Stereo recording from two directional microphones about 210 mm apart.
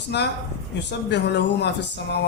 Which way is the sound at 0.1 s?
50° left (ahead or behind).